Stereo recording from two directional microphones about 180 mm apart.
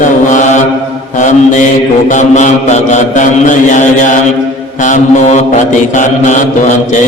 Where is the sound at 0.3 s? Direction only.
45° left (ahead or behind).